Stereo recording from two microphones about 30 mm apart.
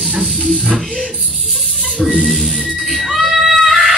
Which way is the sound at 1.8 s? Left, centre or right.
Centre.